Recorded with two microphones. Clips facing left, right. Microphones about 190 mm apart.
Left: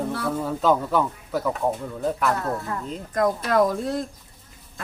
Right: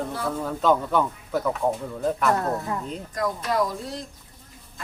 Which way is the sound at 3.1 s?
55° left (ahead or behind).